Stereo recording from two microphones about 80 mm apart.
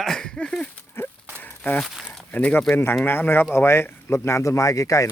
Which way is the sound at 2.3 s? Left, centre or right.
Centre.